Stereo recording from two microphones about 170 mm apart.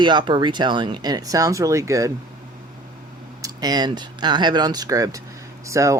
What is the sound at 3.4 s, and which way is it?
Speech, 25° right (ahead or behind).